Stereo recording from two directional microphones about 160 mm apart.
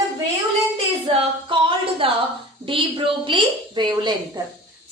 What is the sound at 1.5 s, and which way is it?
A woman's voice, 35° right (ahead or behind).